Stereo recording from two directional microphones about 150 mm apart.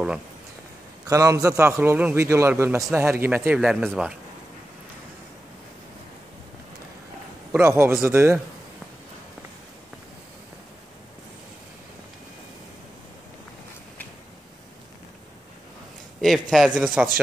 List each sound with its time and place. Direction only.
1.0 s a man's voice: 20° right (ahead or behind); by 4.1 s 5° right (ahead or behind)
7.5 s speech: 15° right (ahead or behind)
16.2 s speech: centre (ahead or behind)